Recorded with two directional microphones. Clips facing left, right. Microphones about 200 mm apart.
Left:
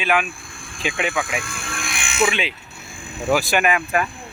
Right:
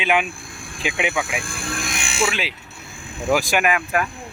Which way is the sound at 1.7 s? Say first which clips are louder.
Right 5 dB; 40° right (ahead or behind).